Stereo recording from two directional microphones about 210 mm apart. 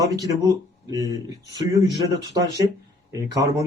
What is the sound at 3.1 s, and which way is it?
Speech, 15° right (ahead or behind).